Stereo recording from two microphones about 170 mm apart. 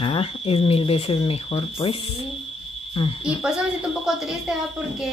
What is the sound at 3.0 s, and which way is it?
Speech, 35° left (ahead or behind).